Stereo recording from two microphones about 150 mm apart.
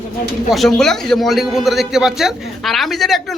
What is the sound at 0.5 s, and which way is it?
A man's voice, centre (ahead or behind).